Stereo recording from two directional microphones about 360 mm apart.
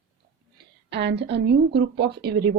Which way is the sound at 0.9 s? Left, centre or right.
Right.